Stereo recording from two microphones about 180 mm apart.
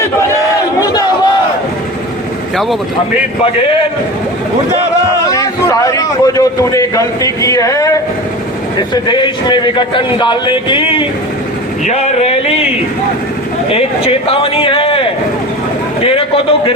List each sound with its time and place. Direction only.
0.8 s crowd: 20° left (ahead or behind)
5.2 s a man's voice: 20° left (ahead or behind)
8.9 s a man's voice: 25° left (ahead or behind)
11.9 s a sound: 35° left (ahead or behind)
13.7 s speech: 35° left (ahead or behind)
16.0 s a sound: 30° left (ahead or behind)